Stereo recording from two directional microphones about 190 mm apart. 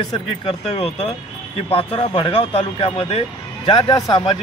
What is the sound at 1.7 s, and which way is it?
Speech, 30° left (ahead or behind).